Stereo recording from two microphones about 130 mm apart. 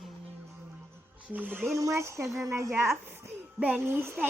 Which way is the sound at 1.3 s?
15° right (ahead or behind).